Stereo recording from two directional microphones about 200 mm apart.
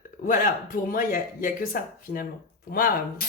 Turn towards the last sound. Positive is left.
turn(degrees=45)  # may be behind; listen again after turning